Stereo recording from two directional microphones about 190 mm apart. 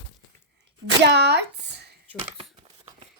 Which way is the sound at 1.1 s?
60° right (ahead or behind).